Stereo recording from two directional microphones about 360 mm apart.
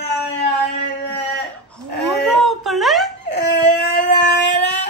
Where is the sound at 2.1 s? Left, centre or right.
Centre.